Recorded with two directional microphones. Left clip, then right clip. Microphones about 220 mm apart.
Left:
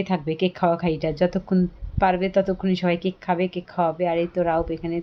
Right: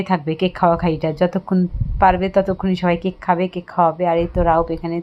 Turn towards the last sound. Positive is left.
turn(degrees=-5)  # may be behind; listen again after turning